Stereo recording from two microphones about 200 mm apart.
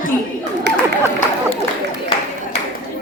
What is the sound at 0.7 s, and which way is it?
Speech, 55° right (ahead or behind).